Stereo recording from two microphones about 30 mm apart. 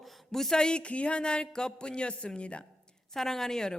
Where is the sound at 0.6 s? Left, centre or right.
Left.